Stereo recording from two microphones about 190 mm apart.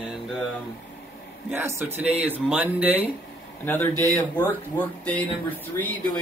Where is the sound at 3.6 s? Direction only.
10° left (ahead or behind).